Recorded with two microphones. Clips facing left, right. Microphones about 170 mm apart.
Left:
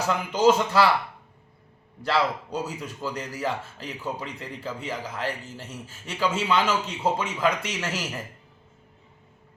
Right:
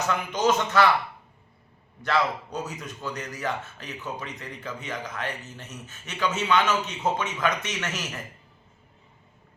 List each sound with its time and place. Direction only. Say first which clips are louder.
0.0 s speech: left 4 dB; 30° left (ahead or behind)
2.0 s a man's voice: left 1 dB; 30° left (ahead or behind)